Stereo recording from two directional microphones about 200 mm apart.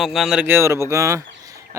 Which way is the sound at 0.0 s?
Centre (ahead or behind).